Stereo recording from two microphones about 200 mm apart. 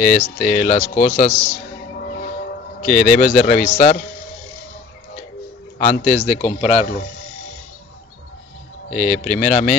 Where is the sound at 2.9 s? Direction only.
Centre (ahead or behind).